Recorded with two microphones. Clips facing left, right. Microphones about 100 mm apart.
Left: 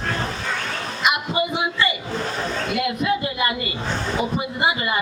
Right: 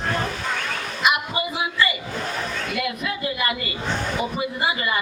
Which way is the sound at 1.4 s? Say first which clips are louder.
Left 2 dB; 30° left (ahead or behind).